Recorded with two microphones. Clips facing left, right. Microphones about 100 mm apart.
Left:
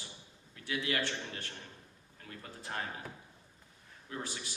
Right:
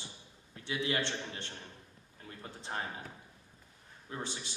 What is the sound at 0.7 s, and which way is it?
A man's voice, 25° right (ahead or behind).